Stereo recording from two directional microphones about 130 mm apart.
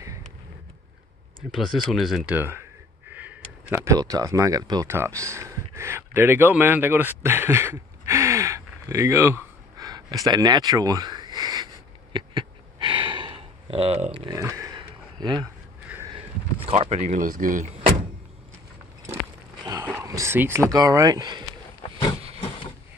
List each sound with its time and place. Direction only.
1.5 s speech: centre (ahead or behind)
2.2 s speech: 15° right (ahead or behind)
3.1 s a sound: 10° right (ahead or behind)
3.9 s speech: 25° right (ahead or behind)
9.8 s a sound: 30° right (ahead or behind); by 14.2 s 50° right (ahead or behind)
14.2 s speech: 25° right (ahead or behind)
14.8 s a sound: 35° right (ahead or behind)
16.2 s speech: 45° right (ahead or behind); by 17.6 s 90° right
19.8 s speech: 15° right (ahead or behind); by 21.5 s 35° right (ahead or behind)